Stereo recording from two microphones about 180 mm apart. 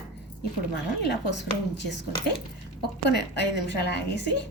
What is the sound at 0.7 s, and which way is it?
A woman's voice, 70° left (ahead or behind).